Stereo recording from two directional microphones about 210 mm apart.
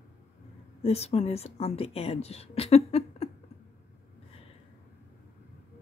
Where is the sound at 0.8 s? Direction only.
30° left (ahead or behind).